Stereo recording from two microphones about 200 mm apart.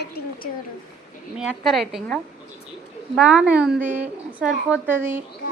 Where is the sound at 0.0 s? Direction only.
50° left (ahead or behind).